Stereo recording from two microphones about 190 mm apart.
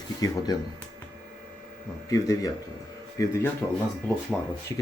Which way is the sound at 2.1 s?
20° left (ahead or behind).